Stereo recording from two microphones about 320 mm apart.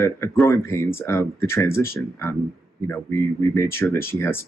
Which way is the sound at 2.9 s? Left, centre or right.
Centre.